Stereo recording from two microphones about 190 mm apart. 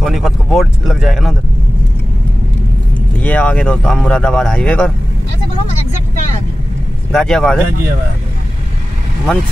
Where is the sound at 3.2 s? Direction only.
5° left (ahead or behind).